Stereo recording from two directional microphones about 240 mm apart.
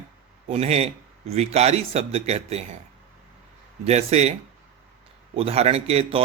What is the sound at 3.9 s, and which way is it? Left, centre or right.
Speech, right.